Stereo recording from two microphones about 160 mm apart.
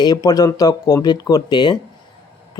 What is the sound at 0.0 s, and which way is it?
A man's voice, 25° left (ahead or behind).